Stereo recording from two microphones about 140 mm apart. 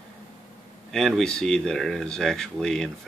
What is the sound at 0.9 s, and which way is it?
Speech, centre (ahead or behind).